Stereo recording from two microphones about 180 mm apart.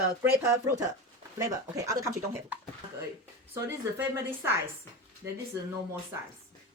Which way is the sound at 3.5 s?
15° right (ahead or behind).